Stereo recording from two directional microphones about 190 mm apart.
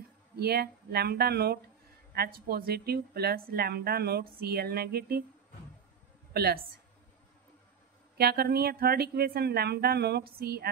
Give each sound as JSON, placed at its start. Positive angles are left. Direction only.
{"t": 0.4, "sound": "a woman's voice", "side_deg": -55}
{"t": 6.3, "sound": "a woman's voice", "side_deg": -55}
{"t": 8.2, "sound": "a woman's voice", "side_deg": -55}